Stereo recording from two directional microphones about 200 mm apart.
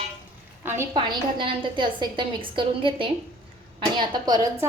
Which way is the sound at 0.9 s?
25° right (ahead or behind).